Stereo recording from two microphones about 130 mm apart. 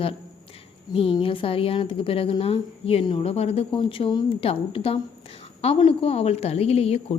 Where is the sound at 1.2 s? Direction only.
45° left (ahead or behind).